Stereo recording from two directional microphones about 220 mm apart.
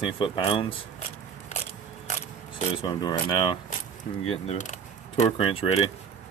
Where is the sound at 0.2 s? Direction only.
25° left (ahead or behind).